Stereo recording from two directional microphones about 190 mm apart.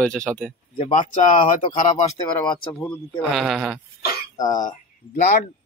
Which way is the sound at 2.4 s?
25° left (ahead or behind).